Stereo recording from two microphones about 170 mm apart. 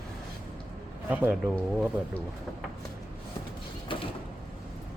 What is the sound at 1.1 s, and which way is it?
Speech, 10° right (ahead or behind).